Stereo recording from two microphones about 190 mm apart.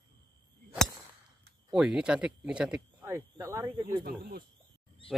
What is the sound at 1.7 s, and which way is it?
Speech, 5° right (ahead or behind).